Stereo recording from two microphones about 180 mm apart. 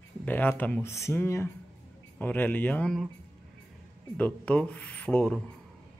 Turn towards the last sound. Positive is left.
turn(degrees=5)  # may be behind; listen again after turning